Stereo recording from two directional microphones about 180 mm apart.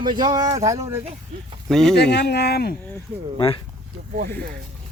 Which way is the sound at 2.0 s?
65° left (ahead or behind).